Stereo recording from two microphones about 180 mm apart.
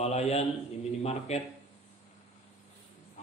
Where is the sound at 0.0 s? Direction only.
35° left (ahead or behind).